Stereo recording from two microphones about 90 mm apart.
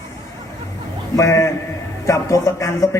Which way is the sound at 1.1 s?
35° left (ahead or behind).